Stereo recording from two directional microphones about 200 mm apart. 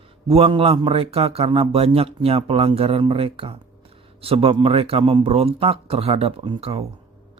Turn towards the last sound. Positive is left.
turn(degrees=-30)  # may be behind; listen again after turning